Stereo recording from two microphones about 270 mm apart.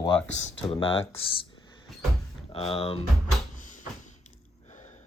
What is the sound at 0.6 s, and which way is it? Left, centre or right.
Speech, centre.